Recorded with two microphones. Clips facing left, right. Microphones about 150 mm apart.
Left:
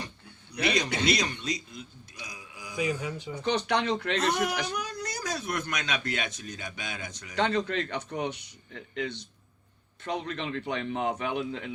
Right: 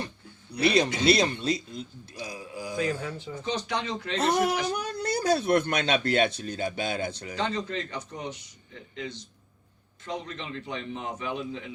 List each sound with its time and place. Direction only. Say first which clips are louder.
0.5 s a man's voice: right 5 dB; 30° right (ahead or behind)
3.3 s a man's voice: left 4 dB; 65° left (ahead or behind)
4.2 s speech: right 3 dB; 30° right (ahead or behind)
7.3 s a man's voice: left 4 dB; 65° left (ahead or behind)